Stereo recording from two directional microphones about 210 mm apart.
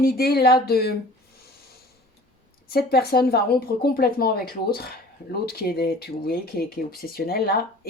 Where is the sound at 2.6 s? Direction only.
50° left (ahead or behind).